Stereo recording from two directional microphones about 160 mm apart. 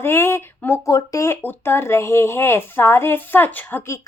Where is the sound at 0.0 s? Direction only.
15° left (ahead or behind).